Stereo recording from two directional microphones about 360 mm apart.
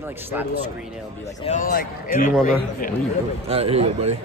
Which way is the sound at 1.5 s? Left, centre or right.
Left.